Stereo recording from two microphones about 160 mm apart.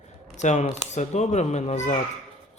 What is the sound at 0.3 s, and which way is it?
Speech, 45° left (ahead or behind).